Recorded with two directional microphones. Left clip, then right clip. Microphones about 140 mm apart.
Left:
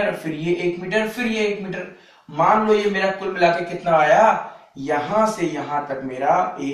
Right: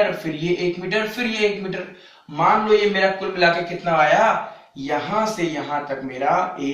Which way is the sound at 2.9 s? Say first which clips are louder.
Right 2 dB; 25° left (ahead or behind).